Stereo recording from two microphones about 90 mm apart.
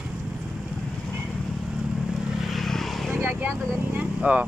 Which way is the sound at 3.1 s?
20° right (ahead or behind).